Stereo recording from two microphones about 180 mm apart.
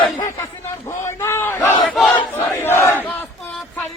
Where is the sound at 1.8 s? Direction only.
5° left (ahead or behind).